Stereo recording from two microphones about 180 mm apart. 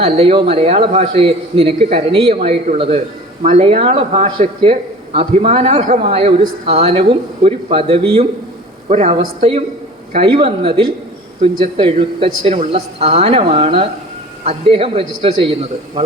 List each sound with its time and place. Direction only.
0.0 s a man's voice: 30° right (ahead or behind)